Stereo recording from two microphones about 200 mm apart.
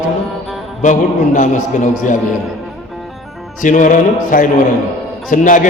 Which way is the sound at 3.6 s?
40° left (ahead or behind).